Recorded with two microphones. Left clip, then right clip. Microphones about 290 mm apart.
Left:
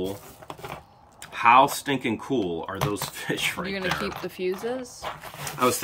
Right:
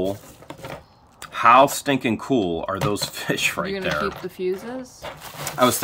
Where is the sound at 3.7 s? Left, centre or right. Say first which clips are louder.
Right 4 dB; centre.